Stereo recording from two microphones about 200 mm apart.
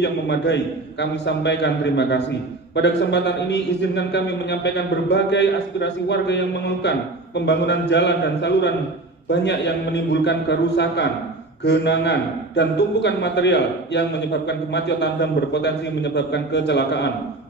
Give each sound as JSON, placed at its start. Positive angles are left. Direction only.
{"t": 0.0, "sound": "a man's voice", "side_deg": 60}